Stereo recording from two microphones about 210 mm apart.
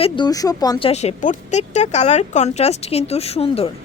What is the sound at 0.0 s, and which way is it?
Speech, 20° left (ahead or behind).